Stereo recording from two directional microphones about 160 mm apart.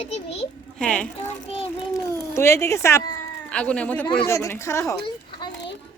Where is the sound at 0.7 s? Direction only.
5° left (ahead or behind).